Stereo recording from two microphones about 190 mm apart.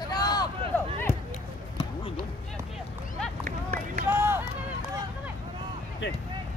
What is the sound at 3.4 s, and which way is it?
Run, 45° right (ahead or behind).